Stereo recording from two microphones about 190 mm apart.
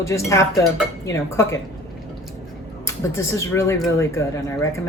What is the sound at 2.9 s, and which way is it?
Speech, 15° left (ahead or behind).